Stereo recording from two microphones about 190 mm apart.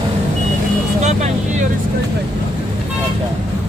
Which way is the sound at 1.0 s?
40° right (ahead or behind).